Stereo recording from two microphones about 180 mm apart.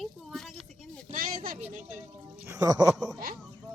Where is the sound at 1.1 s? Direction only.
50° right (ahead or behind).